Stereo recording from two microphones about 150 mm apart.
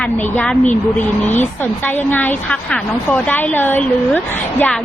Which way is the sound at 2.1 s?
10° left (ahead or behind).